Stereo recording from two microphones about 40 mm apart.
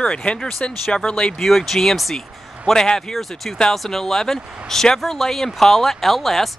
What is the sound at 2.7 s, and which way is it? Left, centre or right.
Speech, centre.